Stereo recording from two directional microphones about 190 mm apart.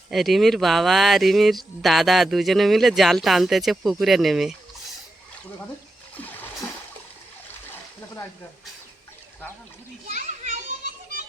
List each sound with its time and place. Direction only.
0.1 s speech: centre (ahead or behind)
6.1 s splash: 10° left (ahead or behind)
10.1 s children playing: 40° right (ahead or behind)